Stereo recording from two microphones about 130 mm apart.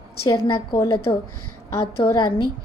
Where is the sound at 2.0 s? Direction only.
40° left (ahead or behind).